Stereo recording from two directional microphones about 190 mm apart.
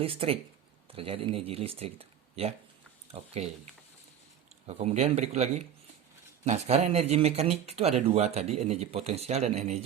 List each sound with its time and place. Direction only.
0.0 s speech: 30° right (ahead or behind)
4.6 s speech: 35° right (ahead or behind)